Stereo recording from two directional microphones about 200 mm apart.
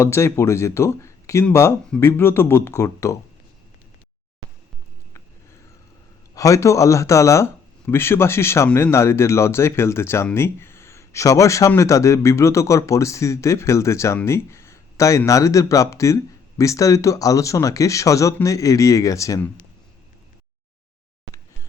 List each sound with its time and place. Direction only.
0.0 s speech: 15° left (ahead or behind)
6.3 s speech: 15° left (ahead or behind)